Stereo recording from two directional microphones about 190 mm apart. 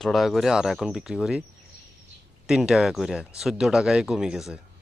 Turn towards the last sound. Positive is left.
turn(degrees=-5)  # may be behind; listen again after turning